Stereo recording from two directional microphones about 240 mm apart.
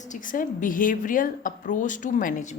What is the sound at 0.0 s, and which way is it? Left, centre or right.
A woman's voice, left.